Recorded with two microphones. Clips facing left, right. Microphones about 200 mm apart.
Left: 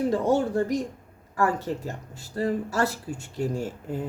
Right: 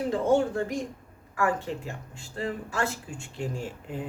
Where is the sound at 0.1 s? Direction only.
40° left (ahead or behind).